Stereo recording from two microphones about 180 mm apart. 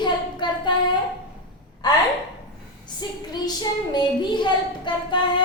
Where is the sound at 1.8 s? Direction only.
25° left (ahead or behind).